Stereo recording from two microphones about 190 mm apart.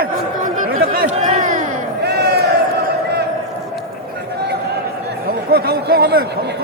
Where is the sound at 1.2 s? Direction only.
35° right (ahead or behind).